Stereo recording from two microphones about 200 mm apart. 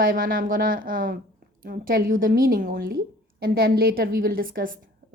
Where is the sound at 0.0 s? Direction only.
45° right (ahead or behind).